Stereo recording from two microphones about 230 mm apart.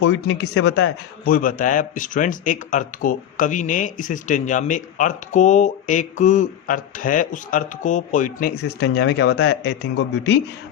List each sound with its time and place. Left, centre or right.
0.0 s a man's voice: left